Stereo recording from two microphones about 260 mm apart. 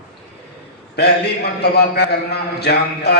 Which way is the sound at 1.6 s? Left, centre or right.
Left.